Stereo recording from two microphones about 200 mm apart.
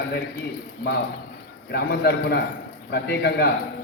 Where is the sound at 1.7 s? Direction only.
55° left (ahead or behind).